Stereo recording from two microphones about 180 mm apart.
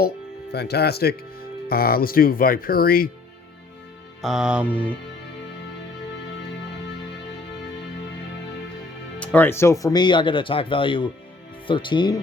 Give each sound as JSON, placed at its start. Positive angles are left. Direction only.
{"t": 0.5, "sound": "speech", "side_deg": 65}
{"t": 4.2, "sound": "music", "side_deg": -5}
{"t": 9.1, "sound": "speech", "side_deg": 10}